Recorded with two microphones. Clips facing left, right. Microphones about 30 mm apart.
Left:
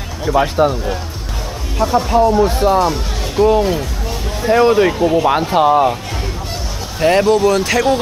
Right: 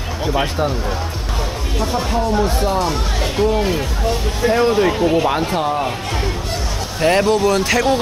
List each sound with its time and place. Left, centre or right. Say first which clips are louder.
0.2 s speech: left 5 dB; centre
0.6 s speech: left 5 dB; centre
2.9 s speech: right 1 dB; centre
4.5 s speech: left 4 dB; centre
4.9 s speech: left 2 dB; centre
5.5 s speech: left 7 dB; centre
7.0 s speech: left 3 dB; centre